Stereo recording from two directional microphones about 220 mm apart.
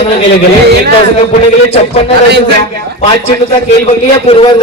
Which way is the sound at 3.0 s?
25° left (ahead or behind).